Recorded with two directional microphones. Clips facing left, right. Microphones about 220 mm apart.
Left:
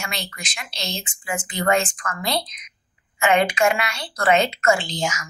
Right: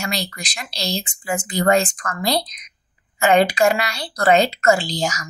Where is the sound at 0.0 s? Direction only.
35° right (ahead or behind).